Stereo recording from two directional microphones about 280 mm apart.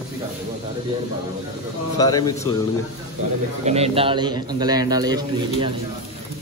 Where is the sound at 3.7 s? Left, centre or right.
Right.